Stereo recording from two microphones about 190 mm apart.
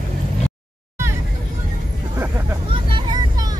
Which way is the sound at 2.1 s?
15° right (ahead or behind).